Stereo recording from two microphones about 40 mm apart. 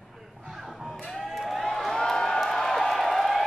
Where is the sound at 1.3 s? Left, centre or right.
Centre.